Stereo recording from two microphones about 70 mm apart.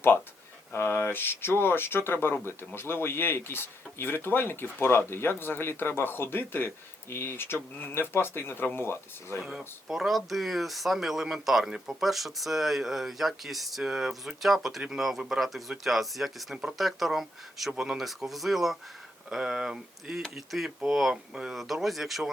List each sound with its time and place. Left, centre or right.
0.7 s speech: left
9.4 s speech: centre